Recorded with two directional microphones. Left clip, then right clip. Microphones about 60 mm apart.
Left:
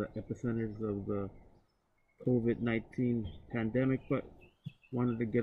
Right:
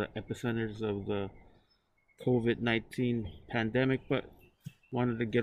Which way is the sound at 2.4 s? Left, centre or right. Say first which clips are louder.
Right 3 dB; right.